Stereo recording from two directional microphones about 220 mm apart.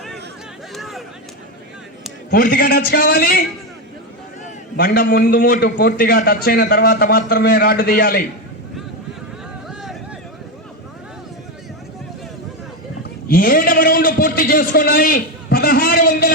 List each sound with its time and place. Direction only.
0.7 s a sound: centre (ahead or behind)
2.3 s a man's voice: 40° left (ahead or behind)
4.8 s a man's voice: 45° left (ahead or behind)
9.6 s vehicle: centre (ahead or behind)
13.2 s a man's voice: 40° left (ahead or behind)